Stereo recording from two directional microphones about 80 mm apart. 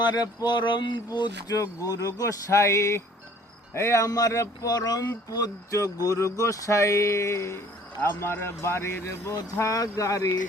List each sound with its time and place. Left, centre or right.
0.4 s speech: left
1.6 s speech: left